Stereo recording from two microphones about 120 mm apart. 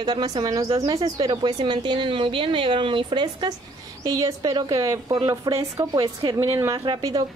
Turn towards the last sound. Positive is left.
turn(degrees=-35)  # may be behind; listen again after turning